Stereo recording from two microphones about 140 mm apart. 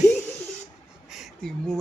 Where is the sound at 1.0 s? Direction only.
Centre (ahead or behind).